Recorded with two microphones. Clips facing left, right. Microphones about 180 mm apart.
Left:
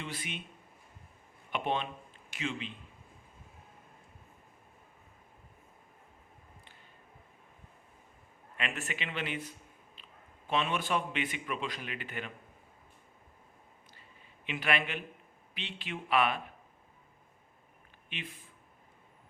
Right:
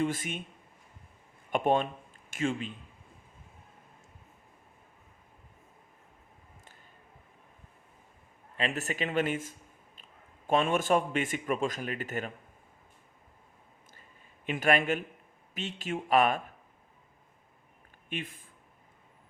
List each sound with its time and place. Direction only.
0.0 s speech: 45° right (ahead or behind)
1.5 s speech: 45° right (ahead or behind)
8.5 s speech: 35° right (ahead or behind)
14.4 s speech: 45° right (ahead or behind)
18.1 s speech: 50° right (ahead or behind)